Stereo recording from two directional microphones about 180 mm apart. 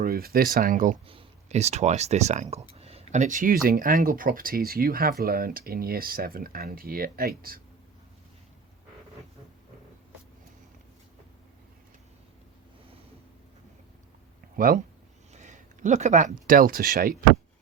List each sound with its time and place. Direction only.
0.0 s speech: 55° right (ahead or behind)
1.0 s speech: 35° right (ahead or behind); by 7.6 s 55° right (ahead or behind)
14.5 s speech: 50° right (ahead or behind)
15.3 s speech: 40° right (ahead or behind)